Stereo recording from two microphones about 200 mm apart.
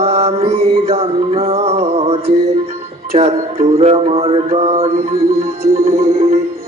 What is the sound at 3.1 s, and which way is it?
Music, 30° right (ahead or behind).